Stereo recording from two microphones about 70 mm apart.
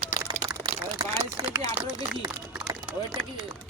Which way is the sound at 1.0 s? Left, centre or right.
Right.